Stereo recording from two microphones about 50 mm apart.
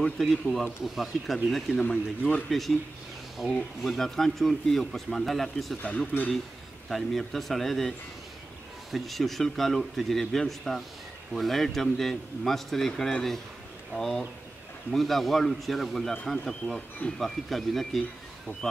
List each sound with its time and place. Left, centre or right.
0.2 s a man's voice: centre
1.8 s a man's voice: centre
3.8 s a man's voice: centre
6.2 s a man's voice: left
6.9 s a man's voice: centre
8.9 s a man's voice: centre